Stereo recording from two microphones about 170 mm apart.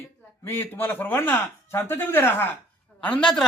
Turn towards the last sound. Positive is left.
turn(degrees=5)  # may be behind; listen again after turning